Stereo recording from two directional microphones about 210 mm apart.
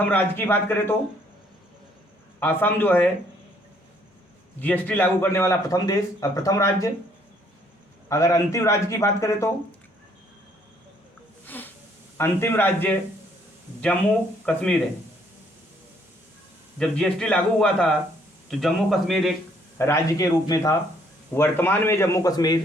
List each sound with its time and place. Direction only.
0.1 s a man's voice: 10° left (ahead or behind)
2.4 s a man's voice: 10° left (ahead or behind)
4.6 s a man's voice: 10° left (ahead or behind)
8.1 s a man's voice: 15° left (ahead or behind)
11.4 s snort: 10° left (ahead or behind)
12.1 s a man's voice: 10° left (ahead or behind)
14.4 s a man's voice: 5° left (ahead or behind)
16.7 s a man's voice: 5° left (ahead or behind)
19.8 s a man's voice: 15° left (ahead or behind)